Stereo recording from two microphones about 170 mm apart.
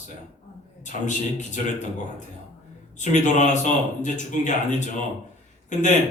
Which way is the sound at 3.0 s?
45° left (ahead or behind).